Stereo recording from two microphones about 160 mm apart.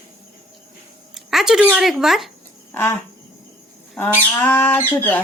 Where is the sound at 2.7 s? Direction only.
10° left (ahead or behind).